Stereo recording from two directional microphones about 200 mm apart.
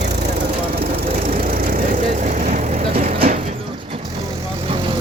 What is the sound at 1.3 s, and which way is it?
Vehicle, 45° right (ahead or behind).